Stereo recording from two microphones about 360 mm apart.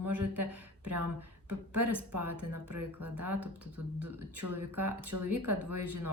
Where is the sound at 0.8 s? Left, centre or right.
Right.